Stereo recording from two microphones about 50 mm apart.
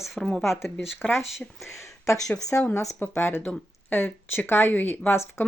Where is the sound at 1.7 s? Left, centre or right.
Left.